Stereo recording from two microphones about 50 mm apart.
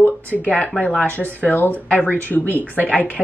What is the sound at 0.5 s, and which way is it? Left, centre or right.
A woman's voice, left.